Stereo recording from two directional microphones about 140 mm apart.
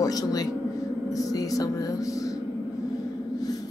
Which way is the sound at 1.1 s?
25° left (ahead or behind).